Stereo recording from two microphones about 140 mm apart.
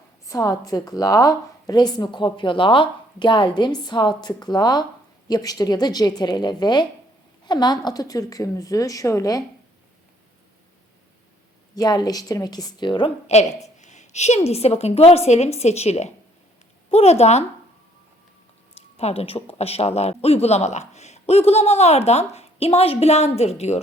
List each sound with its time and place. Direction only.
0.3 s a woman's voice: 25° left (ahead or behind)
11.7 s a woman's voice: 30° left (ahead or behind)
13.3 s speech: 50° left (ahead or behind)
18.9 s speech: 45° left (ahead or behind)